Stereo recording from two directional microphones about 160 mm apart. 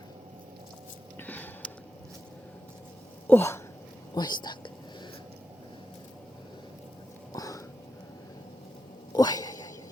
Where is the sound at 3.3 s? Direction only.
15° left (ahead or behind).